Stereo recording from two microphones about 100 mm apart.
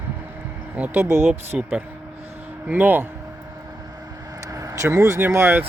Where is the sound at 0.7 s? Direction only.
15° right (ahead or behind).